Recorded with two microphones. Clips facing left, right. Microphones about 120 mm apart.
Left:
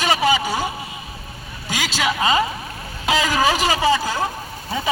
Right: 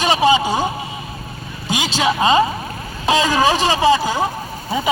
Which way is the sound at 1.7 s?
20° right (ahead or behind).